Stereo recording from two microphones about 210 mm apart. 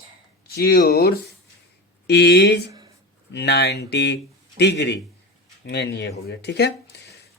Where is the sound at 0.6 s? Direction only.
50° left (ahead or behind).